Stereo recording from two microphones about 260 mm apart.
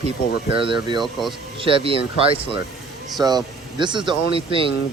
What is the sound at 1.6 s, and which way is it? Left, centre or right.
Speech, right.